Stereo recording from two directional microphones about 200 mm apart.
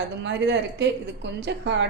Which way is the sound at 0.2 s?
60° right (ahead or behind).